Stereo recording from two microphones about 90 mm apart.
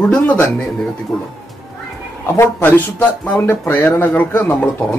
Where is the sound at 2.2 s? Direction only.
30° left (ahead or behind).